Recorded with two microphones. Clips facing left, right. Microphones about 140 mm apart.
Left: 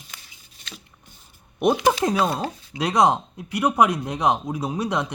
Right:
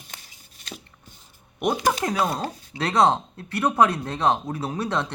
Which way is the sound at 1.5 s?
20° left (ahead or behind).